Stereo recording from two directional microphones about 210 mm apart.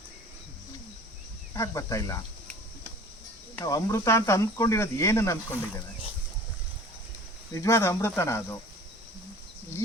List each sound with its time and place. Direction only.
1.5 s speech: 15° left (ahead or behind)
3.6 s speech: 15° left (ahead or behind)
7.5 s speech: 15° left (ahead or behind)